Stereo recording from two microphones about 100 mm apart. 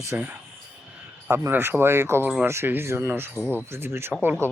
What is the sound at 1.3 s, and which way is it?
Speech, 25° right (ahead or behind).